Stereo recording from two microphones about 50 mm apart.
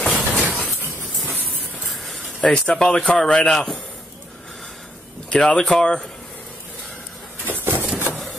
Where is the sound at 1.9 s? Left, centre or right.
Centre.